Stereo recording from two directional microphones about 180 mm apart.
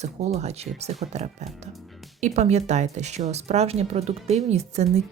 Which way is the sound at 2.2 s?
40° right (ahead or behind).